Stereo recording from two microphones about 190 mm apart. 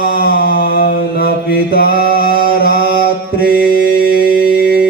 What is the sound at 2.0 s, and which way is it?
Singing, 50° right (ahead or behind).